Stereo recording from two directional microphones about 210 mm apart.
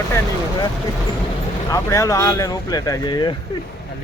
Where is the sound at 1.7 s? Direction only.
15° left (ahead or behind).